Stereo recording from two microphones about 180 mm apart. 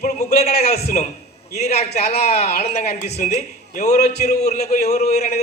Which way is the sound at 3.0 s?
60° left (ahead or behind).